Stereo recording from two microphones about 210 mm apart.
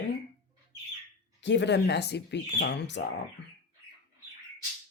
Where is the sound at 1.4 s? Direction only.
55° left (ahead or behind).